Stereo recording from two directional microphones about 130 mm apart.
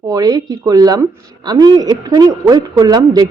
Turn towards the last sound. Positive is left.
turn(degrees=-30)  # may be behind; listen again after turning